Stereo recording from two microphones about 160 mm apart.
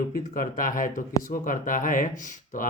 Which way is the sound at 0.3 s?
55° left (ahead or behind).